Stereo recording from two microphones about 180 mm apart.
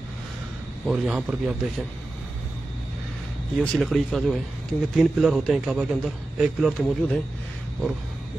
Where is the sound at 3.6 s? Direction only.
5° left (ahead or behind).